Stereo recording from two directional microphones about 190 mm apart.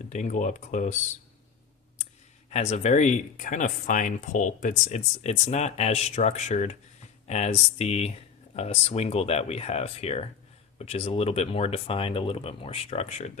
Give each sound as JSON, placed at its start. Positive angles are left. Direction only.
{"t": 0.1, "sound": "speech", "side_deg": 40}
{"t": 2.5, "sound": "speech", "side_deg": 35}